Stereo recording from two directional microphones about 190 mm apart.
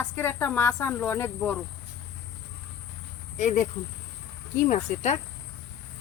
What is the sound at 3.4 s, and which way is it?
Speech, 40° left (ahead or behind).